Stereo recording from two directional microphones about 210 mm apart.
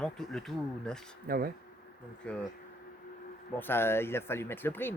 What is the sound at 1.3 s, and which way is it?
Speech, 45° right (ahead or behind).